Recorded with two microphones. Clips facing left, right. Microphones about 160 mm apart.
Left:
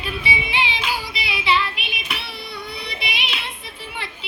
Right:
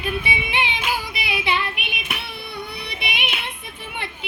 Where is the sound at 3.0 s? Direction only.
55° right (ahead or behind).